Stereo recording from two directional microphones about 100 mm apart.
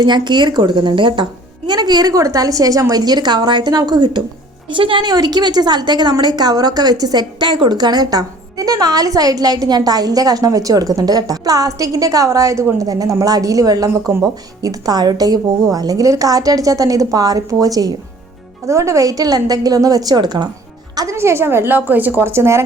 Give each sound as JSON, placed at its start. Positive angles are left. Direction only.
{"t": 0.0, "sound": "speech", "side_deg": -50}
{"t": 4.7, "sound": "speech", "side_deg": -55}
{"t": 5.0, "sound": "a woman's voice", "side_deg": -40}
{"t": 13.9, "sound": "a woman's voice", "side_deg": -25}
{"t": 14.6, "sound": "a woman's voice", "side_deg": -40}
{"t": 21.2, "sound": "a woman's voice", "side_deg": -25}